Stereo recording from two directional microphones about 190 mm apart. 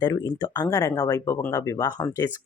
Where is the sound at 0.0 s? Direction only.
20° left (ahead or behind).